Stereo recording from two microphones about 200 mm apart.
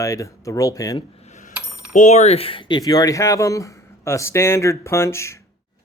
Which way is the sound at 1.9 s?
35° left (ahead or behind).